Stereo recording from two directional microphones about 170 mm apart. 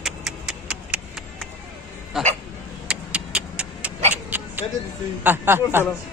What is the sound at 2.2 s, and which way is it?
Hiccup, centre (ahead or behind).